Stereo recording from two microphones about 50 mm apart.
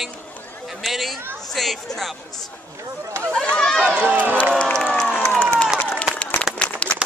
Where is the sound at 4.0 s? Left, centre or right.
Right.